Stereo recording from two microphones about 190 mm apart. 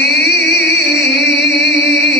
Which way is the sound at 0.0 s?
60° left (ahead or behind).